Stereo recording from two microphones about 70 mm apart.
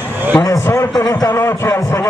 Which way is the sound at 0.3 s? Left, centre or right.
Left.